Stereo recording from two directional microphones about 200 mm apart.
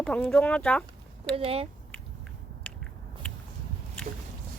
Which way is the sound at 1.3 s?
30° right (ahead or behind).